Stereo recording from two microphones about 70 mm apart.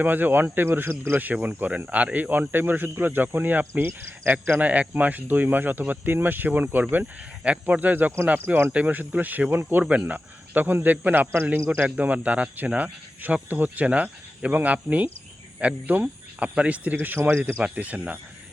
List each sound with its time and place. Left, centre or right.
0.0 s speech: right
7.0 s speech: centre